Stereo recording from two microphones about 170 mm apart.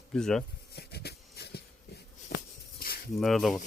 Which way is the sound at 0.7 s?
70° left (ahead or behind).